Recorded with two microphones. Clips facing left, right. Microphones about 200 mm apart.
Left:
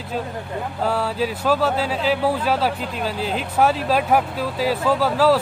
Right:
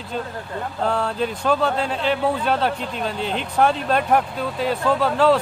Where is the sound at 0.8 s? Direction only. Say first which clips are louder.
Even; 5° left (ahead or behind).